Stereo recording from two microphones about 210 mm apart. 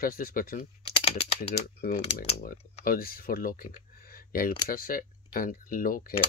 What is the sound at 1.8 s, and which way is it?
Speech, 50° left (ahead or behind).